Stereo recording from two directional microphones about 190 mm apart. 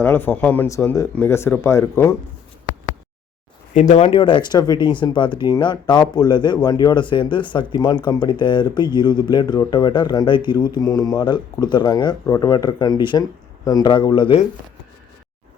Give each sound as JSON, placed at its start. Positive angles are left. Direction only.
{"t": 0.0, "sound": "speech", "side_deg": 10}
{"t": 3.8, "sound": "speech", "side_deg": 35}